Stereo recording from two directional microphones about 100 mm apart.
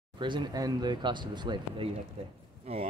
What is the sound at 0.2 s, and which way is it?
Speech, 50° right (ahead or behind).